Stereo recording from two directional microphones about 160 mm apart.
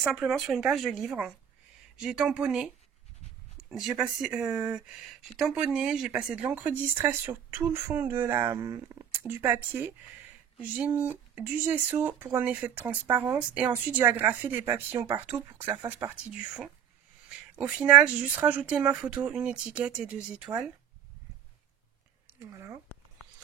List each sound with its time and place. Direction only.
0.0 s speech: centre (ahead or behind)
3.7 s speech: 5° right (ahead or behind)
22.4 s speech: 15° right (ahead or behind)